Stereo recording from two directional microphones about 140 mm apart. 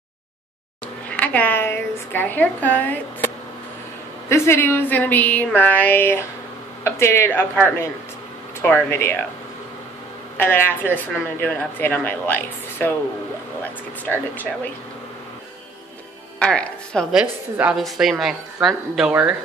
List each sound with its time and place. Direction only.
1.1 s a woman's voice: 10° left (ahead or behind)
4.3 s a woman's voice: 15° left (ahead or behind)
10.3 s a woman's voice: 15° left (ahead or behind)
14.3 s a woman's voice: 10° left (ahead or behind)
16.3 s a woman's voice: 10° left (ahead or behind)
17.1 s a woman's voice: 5° right (ahead or behind)